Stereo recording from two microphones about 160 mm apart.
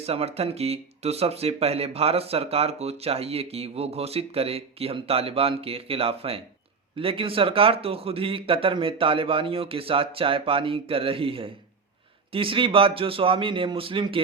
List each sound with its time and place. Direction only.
0.0 s speech: 40° right (ahead or behind)